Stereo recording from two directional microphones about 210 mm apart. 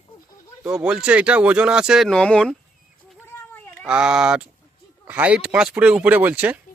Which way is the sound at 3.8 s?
5° right (ahead or behind).